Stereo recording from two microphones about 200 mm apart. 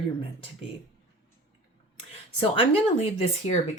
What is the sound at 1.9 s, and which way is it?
Speech, 25° left (ahead or behind).